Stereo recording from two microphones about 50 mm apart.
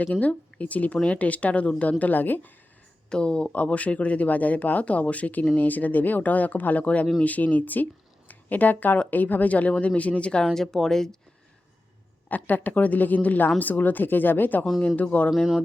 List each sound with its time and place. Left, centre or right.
0.0 s speech: left
3.1 s speech: centre
10.4 s speech: centre
12.3 s speech: left
14.8 s speech: left